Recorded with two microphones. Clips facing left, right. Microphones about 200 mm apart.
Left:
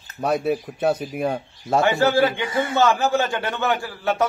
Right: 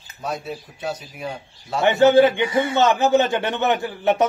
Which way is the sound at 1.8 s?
20° right (ahead or behind).